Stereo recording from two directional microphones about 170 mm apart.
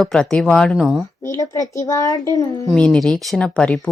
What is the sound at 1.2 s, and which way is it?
Speech, 20° left (ahead or behind).